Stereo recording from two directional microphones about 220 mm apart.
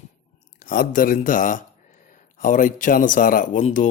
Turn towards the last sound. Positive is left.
turn(degrees=35)  # may be behind; listen again after turning